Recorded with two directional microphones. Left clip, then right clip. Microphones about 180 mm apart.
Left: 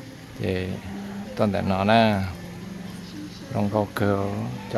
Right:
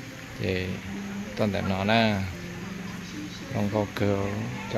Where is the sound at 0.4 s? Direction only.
10° left (ahead or behind).